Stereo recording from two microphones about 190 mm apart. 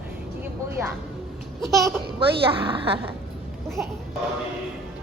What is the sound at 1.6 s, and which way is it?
Speech, centre (ahead or behind).